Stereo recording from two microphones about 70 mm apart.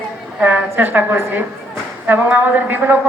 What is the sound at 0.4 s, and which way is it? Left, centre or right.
A man's voice, right.